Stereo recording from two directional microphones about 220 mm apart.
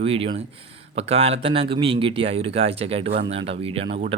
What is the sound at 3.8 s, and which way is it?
Speech, 50° right (ahead or behind).